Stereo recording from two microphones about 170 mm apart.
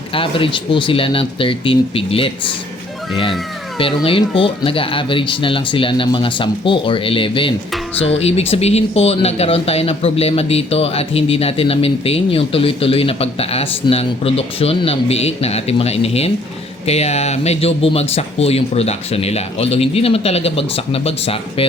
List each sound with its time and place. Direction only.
0.1 s speech: 30° left (ahead or behind)
3.8 s speech: 30° left (ahead or behind)